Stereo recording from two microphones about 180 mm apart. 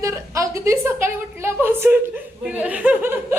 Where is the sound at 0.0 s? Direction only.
15° right (ahead or behind).